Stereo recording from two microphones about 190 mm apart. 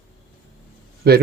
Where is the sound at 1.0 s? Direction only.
60° right (ahead or behind).